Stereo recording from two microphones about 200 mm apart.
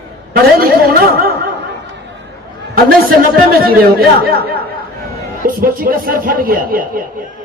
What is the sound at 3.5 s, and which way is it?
Speech, 45° right (ahead or behind).